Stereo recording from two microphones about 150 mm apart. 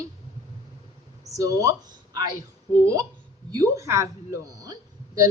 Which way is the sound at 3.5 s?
20° right (ahead or behind).